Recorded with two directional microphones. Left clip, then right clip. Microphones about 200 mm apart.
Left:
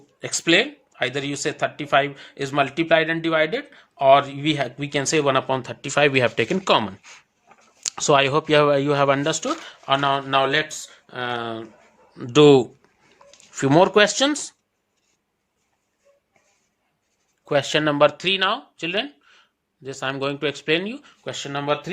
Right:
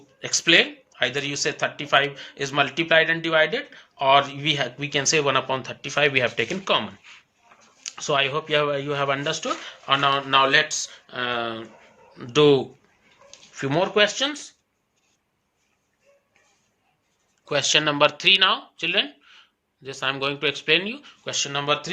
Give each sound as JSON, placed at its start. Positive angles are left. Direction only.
{"t": 0.2, "sound": "speech", "side_deg": 60}
{"t": 17.4, "sound": "speech", "side_deg": 40}